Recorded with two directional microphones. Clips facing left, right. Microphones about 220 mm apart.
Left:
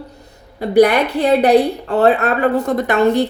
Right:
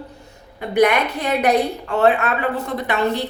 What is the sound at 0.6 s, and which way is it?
A woman's voice, 35° left (ahead or behind).